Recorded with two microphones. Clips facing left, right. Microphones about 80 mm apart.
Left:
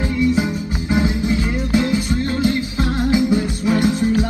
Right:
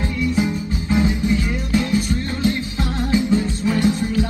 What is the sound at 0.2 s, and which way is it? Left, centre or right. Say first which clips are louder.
Music: left 2 dB; left.